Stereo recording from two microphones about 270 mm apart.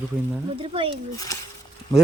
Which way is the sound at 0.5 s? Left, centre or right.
Centre.